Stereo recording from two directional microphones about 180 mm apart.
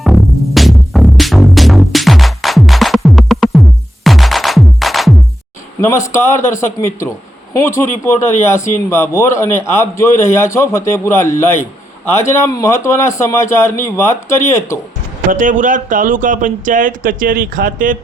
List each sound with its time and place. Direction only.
0.0 s music: centre (ahead or behind)
6.1 s speech: 15° left (ahead or behind)
15.3 s speech: 45° right (ahead or behind)